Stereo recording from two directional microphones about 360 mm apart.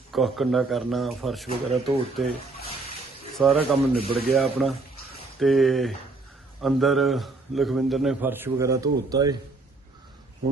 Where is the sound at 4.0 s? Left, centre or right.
Centre.